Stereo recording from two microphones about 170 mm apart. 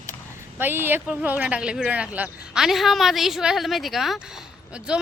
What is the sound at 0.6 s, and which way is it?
Speech, 10° right (ahead or behind).